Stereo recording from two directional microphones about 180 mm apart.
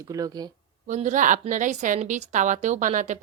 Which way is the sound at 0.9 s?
40° right (ahead or behind).